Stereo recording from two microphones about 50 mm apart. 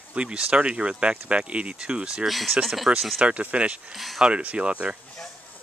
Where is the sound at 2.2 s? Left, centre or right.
Centre.